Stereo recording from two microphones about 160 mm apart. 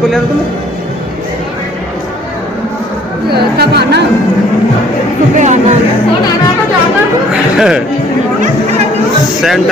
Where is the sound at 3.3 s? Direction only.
90° right.